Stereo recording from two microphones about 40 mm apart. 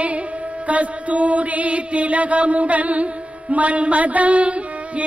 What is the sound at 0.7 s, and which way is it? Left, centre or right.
Mantra, right.